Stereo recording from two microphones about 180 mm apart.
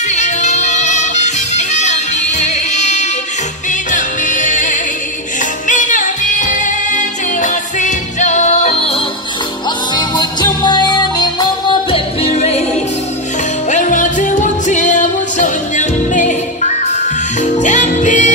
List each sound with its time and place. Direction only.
0.1 s music: 40° left (ahead or behind)
13.7 s music: 45° left (ahead or behind)